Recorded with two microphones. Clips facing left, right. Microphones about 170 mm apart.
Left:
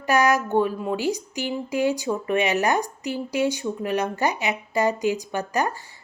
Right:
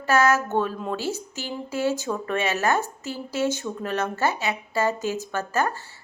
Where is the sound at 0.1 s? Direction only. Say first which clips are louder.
Left 1 dB; 15° left (ahead or behind).